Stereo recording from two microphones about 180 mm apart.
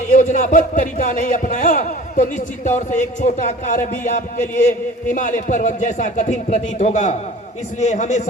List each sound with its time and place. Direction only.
0.1 s a man's voice: 45° left (ahead or behind)